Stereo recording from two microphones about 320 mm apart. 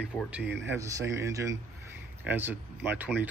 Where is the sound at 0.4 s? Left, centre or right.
Right.